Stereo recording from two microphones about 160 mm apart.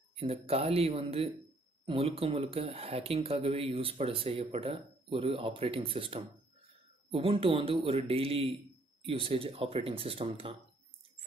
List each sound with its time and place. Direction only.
0.1 s speech: 40° right (ahead or behind)